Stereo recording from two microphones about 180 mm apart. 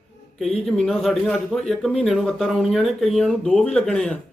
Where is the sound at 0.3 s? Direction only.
Centre (ahead or behind).